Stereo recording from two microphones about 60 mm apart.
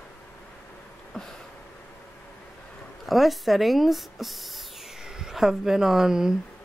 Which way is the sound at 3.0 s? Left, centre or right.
Centre.